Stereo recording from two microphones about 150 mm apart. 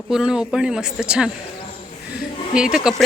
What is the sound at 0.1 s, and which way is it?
Speech, 5° right (ahead or behind).